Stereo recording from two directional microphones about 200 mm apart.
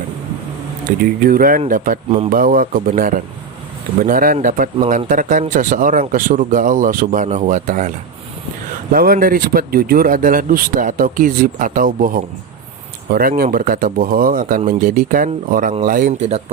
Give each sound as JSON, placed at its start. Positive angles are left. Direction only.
{"t": 1.2, "sound": "speech", "side_deg": -45}
{"t": 2.0, "sound": "speech", "side_deg": -30}
{"t": 2.3, "sound": "speech", "side_deg": -45}